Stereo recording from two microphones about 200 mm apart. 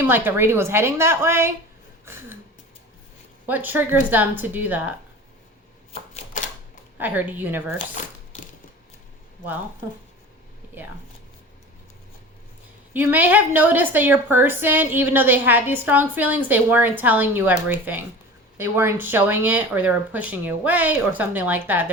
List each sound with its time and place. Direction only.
0.0 s a woman's voice: 10° right (ahead or behind)
3.4 s a woman's voice: 10° right (ahead or behind)
5.9 s typewriter: 35° left (ahead or behind)
7.0 s a woman's voice: 10° right (ahead or behind)
7.9 s a sound: 40° left (ahead or behind)
12.9 s a woman's voice: 10° right (ahead or behind)